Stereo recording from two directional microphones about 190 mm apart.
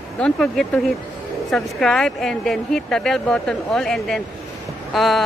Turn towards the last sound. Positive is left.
turn(degrees=0)  # may be behind; listen again after turning